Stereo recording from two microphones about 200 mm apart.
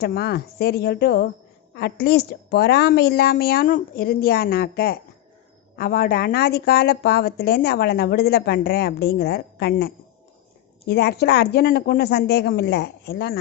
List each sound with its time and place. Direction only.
0.0 s speech: 50° left (ahead or behind)